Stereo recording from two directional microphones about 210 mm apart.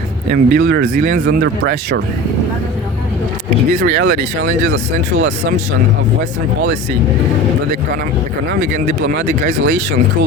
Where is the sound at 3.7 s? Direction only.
55° right (ahead or behind).